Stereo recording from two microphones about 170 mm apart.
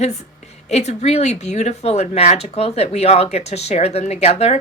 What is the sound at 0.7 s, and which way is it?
Speech, 40° left (ahead or behind).